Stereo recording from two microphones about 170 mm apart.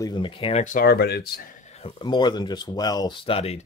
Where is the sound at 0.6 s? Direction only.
50° left (ahead or behind); by 1.4 s 70° left (ahead or behind).